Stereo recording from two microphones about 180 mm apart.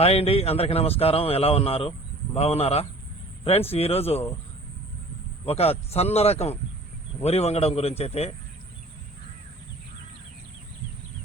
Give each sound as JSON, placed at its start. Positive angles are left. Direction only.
{"t": 0.0, "sound": "a man's voice", "side_deg": 35}
{"t": 5.5, "sound": "a man's voice", "side_deg": 35}